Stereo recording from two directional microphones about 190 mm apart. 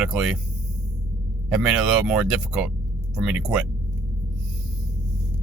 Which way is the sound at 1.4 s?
5° right (ahead or behind).